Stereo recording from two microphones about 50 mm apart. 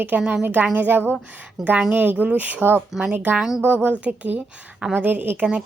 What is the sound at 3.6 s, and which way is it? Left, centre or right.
Speech, right.